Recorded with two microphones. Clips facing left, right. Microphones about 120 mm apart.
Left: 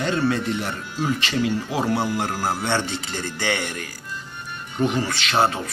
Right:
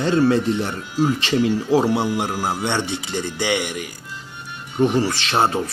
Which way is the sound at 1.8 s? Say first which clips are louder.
Right 3 dB; 20° right (ahead or behind).